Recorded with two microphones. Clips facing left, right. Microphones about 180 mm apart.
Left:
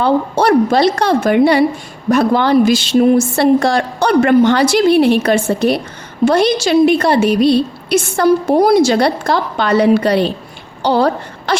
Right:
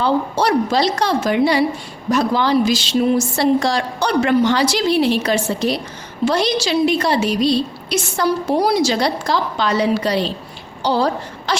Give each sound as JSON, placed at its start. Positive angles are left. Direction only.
{"t": 0.0, "sound": "a woman's voice", "side_deg": 55}